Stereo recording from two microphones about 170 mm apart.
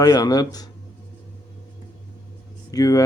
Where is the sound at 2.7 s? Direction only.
20° left (ahead or behind).